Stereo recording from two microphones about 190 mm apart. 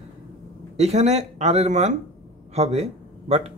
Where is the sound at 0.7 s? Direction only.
35° right (ahead or behind).